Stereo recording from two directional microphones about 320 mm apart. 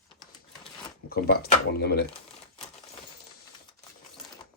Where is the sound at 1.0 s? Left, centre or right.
Left.